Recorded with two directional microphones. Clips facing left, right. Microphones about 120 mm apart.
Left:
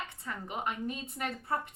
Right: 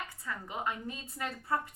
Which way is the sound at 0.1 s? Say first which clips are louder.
Left 1 dB; 20° left (ahead or behind).